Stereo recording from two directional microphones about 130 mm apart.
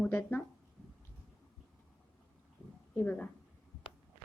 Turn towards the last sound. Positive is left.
turn(degrees=10)  # may be behind; listen again after turning